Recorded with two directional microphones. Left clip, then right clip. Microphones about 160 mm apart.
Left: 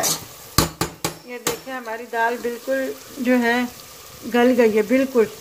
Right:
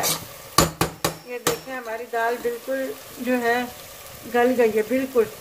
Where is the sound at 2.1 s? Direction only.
50° left (ahead or behind).